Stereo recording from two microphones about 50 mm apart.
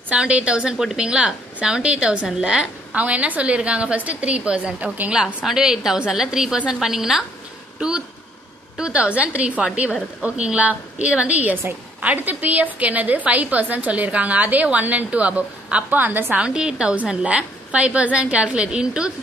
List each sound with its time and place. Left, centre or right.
0.1 s a woman's voice: right
3.0 s a woman's voice: right
5.1 s a woman's voice: centre
8.7 s a woman's voice: centre; by 16.3 s right
16.3 s a woman's voice: centre